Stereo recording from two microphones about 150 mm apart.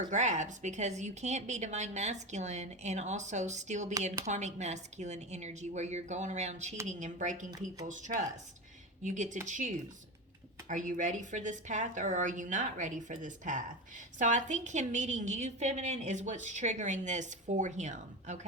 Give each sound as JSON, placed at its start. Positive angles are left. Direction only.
{"t": 0.1, "sound": "a woman's voice", "side_deg": -50}